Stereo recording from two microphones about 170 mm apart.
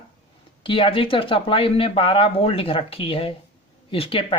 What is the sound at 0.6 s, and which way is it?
Speech, 30° left (ahead or behind).